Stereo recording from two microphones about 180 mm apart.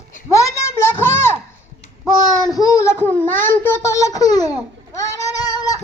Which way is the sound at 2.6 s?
15° left (ahead or behind).